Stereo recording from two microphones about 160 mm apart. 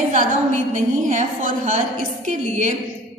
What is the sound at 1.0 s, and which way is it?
A woman's voice, 50° right (ahead or behind).